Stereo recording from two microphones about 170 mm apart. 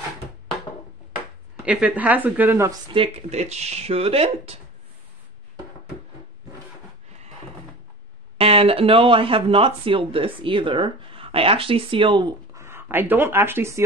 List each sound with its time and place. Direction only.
1.6 s speech: 5° right (ahead or behind)
2.9 s speech: 35° right (ahead or behind)
8.4 s speech: 35° right (ahead or behind)
12.5 s speech: 15° right (ahead or behind)